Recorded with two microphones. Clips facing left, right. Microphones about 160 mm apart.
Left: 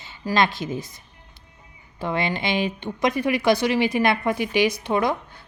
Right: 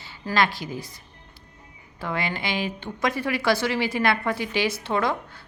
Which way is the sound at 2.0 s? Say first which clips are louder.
Left 4 dB; 20° left (ahead or behind).